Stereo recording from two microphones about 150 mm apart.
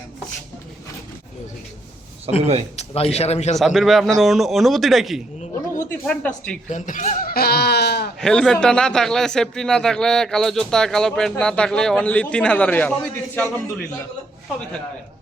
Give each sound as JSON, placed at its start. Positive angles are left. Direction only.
{"t": 2.4, "sound": "speech", "side_deg": -45}
{"t": 2.7, "sound": "a man's voice", "side_deg": 45}
{"t": 3.6, "sound": "speech", "side_deg": 0}
{"t": 6.7, "sound": "speech", "side_deg": 55}
{"t": 8.2, "sound": "speech", "side_deg": 5}